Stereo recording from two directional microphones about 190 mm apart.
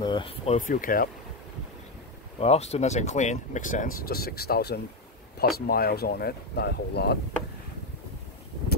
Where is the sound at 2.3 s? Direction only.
35° left (ahead or behind); by 7.2 s 60° left (ahead or behind).